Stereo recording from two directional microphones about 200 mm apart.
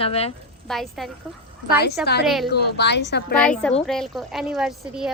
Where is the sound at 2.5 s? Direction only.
55° left (ahead or behind).